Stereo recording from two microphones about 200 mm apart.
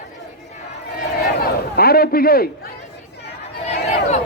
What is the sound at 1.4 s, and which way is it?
A man's voice, 50° left (ahead or behind).